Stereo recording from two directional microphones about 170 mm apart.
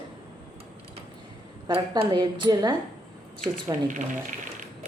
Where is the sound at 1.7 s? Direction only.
30° right (ahead or behind).